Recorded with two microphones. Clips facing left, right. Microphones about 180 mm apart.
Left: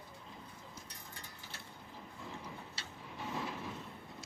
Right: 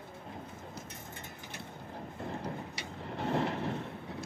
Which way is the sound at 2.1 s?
65° right (ahead or behind).